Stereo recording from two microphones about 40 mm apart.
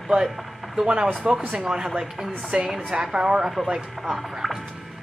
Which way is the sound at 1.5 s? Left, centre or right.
Right.